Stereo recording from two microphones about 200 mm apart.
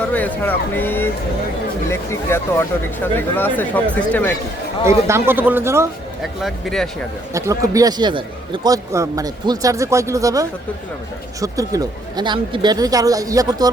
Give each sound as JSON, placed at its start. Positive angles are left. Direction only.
{"t": 0.0, "sound": "speech", "side_deg": 10}
{"t": 4.9, "sound": "a man's voice", "side_deg": -15}
{"t": 6.4, "sound": "speech", "side_deg": 0}
{"t": 7.3, "sound": "a man's voice", "side_deg": -15}